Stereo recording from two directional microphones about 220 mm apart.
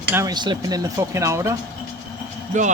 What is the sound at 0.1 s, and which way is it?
Speech, 15° right (ahead or behind).